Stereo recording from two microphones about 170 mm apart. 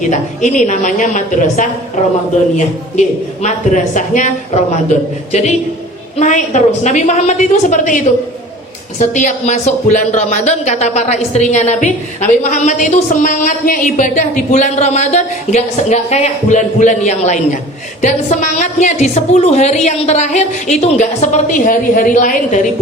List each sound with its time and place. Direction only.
0.1 s speech: 45° left (ahead or behind)
3.4 s speech: 45° left (ahead or behind)